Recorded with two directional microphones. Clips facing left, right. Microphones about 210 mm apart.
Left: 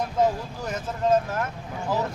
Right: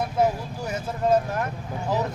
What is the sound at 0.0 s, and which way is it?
Vehicle, 10° right (ahead or behind).